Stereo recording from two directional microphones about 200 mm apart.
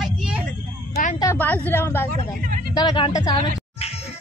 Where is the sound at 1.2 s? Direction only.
10° left (ahead or behind).